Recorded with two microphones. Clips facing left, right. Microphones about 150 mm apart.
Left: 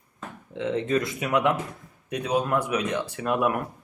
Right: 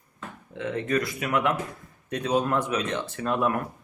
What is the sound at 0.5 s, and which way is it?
Speech, 20° left (ahead or behind).